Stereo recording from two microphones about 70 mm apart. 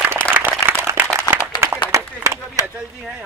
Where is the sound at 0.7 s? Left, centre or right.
Right.